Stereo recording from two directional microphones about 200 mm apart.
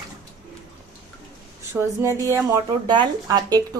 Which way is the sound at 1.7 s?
15° right (ahead or behind).